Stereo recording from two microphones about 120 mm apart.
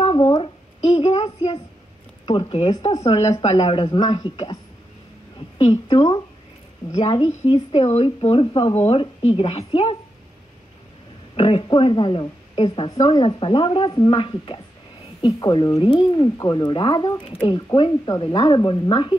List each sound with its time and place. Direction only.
0.0 s a sound: 45° left (ahead or behind)
0.8 s a woman's voice: 45° left (ahead or behind)
2.7 s speech: 35° left (ahead or behind)
3.0 s a woman's voice: 60° left (ahead or behind)
3.5 s speech: 40° left (ahead or behind)
5.6 s a woman's voice: 40° left (ahead or behind)
11.3 s a woman's voice: 45° left (ahead or behind)
15.2 s speech: 35° left (ahead or behind)
17.3 s a woman's voice: 50° left (ahead or behind)
17.7 s speech: 35° left (ahead or behind)